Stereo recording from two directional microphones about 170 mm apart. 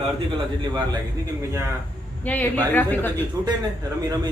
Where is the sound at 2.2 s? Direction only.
10° left (ahead or behind).